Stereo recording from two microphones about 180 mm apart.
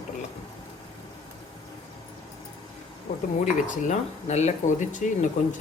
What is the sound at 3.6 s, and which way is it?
Speech, 40° left (ahead or behind).